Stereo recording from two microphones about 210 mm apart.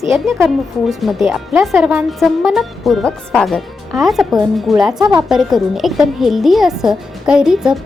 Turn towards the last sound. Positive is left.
turn(degrees=-5)  # may be behind; listen again after turning